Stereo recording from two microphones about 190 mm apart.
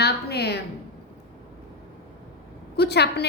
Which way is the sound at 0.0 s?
60° left (ahead or behind).